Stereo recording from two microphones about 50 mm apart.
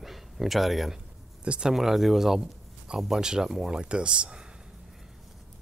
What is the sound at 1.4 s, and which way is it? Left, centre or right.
Speech, right.